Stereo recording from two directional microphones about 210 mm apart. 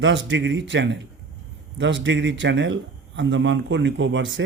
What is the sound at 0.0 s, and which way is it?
A man's voice, 60° right (ahead or behind).